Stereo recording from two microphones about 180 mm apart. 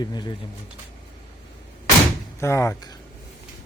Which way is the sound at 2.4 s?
15° left (ahead or behind).